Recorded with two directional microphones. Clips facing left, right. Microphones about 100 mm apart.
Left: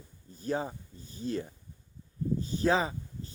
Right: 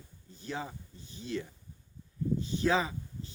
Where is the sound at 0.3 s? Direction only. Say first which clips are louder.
Left 6 dB; 40° left (ahead or behind).